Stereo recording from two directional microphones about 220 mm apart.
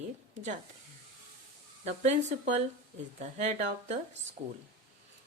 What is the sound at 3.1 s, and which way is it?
Speech, 35° right (ahead or behind).